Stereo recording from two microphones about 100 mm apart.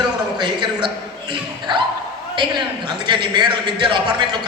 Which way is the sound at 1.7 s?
45° right (ahead or behind).